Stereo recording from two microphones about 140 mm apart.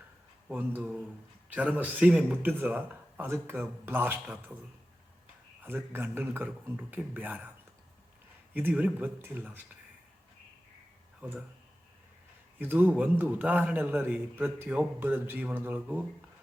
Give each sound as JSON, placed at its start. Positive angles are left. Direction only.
{"t": 0.4, "sound": "a man's voice", "side_deg": -10}
{"t": 5.6, "sound": "a man's voice", "side_deg": -15}
{"t": 8.5, "sound": "a man's voice", "side_deg": -10}
{"t": 11.2, "sound": "speech", "side_deg": -10}
{"t": 12.5, "sound": "a man's voice", "side_deg": -15}